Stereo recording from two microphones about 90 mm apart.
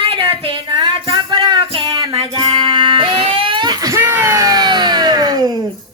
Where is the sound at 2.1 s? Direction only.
65° right (ahead or behind).